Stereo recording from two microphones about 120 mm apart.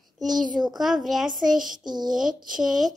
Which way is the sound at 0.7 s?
5° right (ahead or behind).